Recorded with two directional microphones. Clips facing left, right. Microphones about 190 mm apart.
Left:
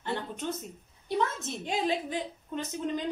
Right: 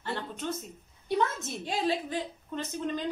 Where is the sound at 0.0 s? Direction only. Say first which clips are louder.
Left 1 dB; 20° left (ahead or behind).